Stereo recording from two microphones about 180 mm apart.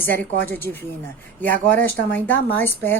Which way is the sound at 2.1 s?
10° left (ahead or behind).